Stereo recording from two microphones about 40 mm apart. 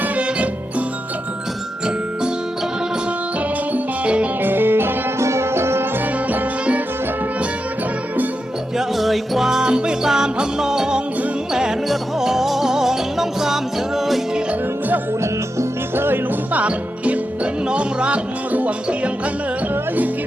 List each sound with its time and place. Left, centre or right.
4.0 s music: right
4.4 s music: right
5.4 s music: right
9.0 s music: centre
9.5 s music: centre
12.2 s music: centre
16.0 s music: right
16.5 s music: right